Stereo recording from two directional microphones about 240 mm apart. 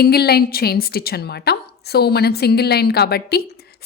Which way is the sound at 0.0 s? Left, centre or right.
Left.